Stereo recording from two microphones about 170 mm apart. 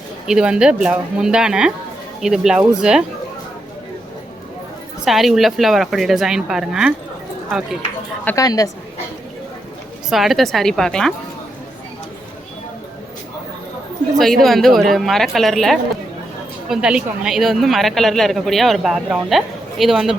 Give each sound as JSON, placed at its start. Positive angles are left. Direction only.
{"t": 0.3, "sound": "a woman's voice", "side_deg": -5}
{"t": 5.0, "sound": "a woman's voice", "side_deg": 0}
{"t": 8.2, "sound": "a woman's voice", "side_deg": 10}
{"t": 10.1, "sound": "a woman's voice", "side_deg": 0}
{"t": 14.4, "sound": "a woman's voice", "side_deg": 0}